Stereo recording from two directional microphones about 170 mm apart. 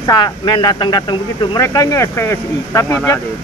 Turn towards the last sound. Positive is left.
turn(degrees=20)  # may be behind; listen again after turning